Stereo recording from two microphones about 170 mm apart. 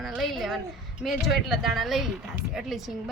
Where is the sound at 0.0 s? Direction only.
Centre (ahead or behind).